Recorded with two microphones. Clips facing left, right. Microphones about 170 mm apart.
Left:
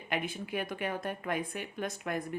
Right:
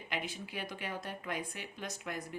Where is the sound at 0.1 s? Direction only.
55° left (ahead or behind).